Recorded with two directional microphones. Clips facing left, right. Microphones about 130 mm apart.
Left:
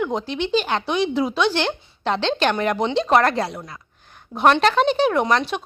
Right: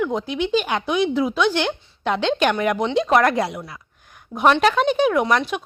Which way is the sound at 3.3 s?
20° right (ahead or behind).